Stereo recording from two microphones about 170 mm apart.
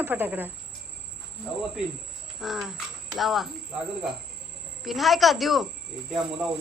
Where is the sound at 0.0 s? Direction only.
10° right (ahead or behind).